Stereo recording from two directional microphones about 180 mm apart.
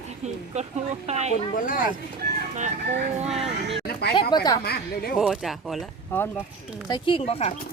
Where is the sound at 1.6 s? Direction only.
50° left (ahead or behind).